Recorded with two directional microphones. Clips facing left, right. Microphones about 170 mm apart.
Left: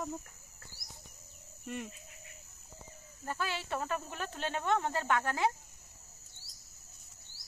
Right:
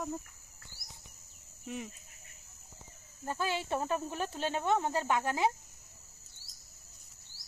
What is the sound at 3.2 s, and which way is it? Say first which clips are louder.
Insect: right 3 dB; 15° right (ahead or behind).